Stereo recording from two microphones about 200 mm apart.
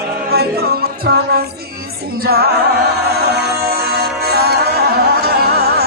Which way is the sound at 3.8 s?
50° right (ahead or behind).